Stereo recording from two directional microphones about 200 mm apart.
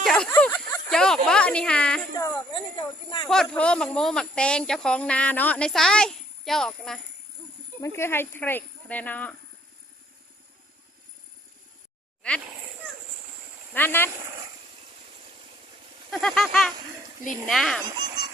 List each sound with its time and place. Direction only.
0.0 s speech: 5° left (ahead or behind)
2.1 s speech: 20° left (ahead or behind)
3.2 s speech: centre (ahead or behind)
7.8 s speech: 15° left (ahead or behind)
13.7 s speech: 10° left (ahead or behind)
16.1 s speech: 5° left (ahead or behind)
17.8 s speech: 20° right (ahead or behind)